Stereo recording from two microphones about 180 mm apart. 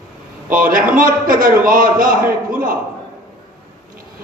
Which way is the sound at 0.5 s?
50° right (ahead or behind).